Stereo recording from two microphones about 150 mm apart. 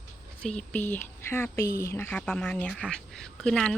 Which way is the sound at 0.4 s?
10° left (ahead or behind).